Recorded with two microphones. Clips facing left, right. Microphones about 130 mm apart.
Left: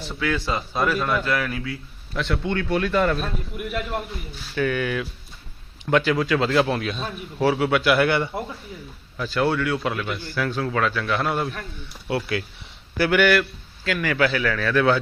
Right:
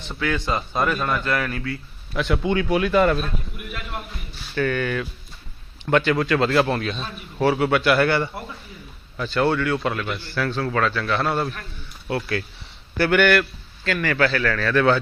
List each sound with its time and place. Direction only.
0.2 s speech: centre (ahead or behind)
2.1 s speech: 10° right (ahead or behind)
4.5 s a man's voice: 10° left (ahead or behind)
13.0 s a man's voice: 5° left (ahead or behind)